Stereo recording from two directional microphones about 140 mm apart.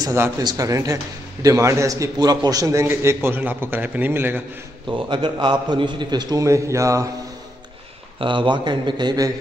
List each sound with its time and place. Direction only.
0.0 s a man's voice: 25° right (ahead or behind)
4.8 s a man's voice: 35° right (ahead or behind)
8.2 s a man's voice: 35° right (ahead or behind)